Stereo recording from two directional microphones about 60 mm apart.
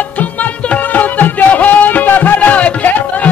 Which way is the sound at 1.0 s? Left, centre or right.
Left.